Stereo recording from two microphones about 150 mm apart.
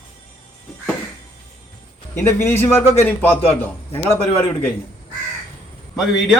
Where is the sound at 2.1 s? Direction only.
15° left (ahead or behind).